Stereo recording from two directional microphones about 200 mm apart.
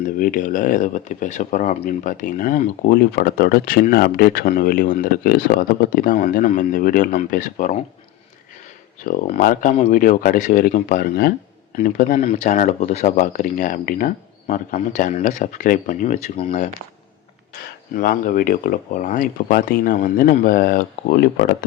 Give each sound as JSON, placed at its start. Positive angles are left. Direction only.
{"t": 0.2, "sound": "speech", "side_deg": 45}
{"t": 9.0, "sound": "speech", "side_deg": 45}
{"t": 17.9, "sound": "speech", "side_deg": 45}